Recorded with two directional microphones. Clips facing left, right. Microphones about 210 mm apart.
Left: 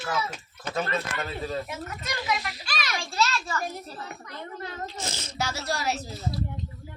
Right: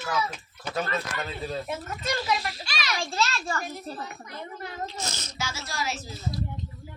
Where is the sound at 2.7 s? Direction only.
50° left (ahead or behind).